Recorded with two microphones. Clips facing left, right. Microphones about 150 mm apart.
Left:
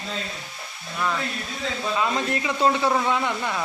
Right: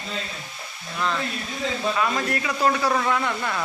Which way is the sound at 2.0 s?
20° left (ahead or behind).